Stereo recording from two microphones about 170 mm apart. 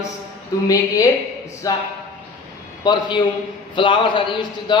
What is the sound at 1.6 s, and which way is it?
Speech, 20° left (ahead or behind).